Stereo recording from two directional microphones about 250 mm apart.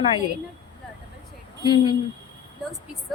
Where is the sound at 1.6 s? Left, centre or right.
Centre.